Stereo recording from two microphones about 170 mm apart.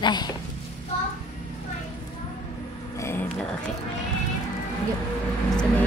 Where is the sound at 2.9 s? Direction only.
15° left (ahead or behind).